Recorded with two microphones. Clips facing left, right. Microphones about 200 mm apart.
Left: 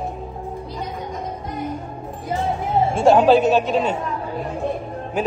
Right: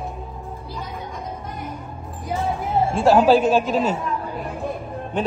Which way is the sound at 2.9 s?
Centre (ahead or behind).